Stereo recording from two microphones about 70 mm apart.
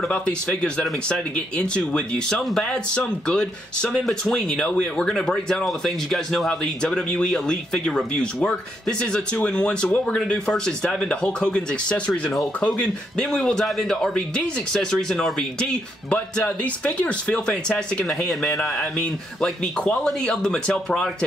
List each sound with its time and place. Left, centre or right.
0.0 s speech: centre
18.6 s speech: centre